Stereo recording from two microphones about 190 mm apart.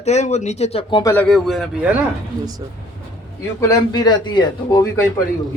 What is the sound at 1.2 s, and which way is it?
Speech, centre (ahead or behind).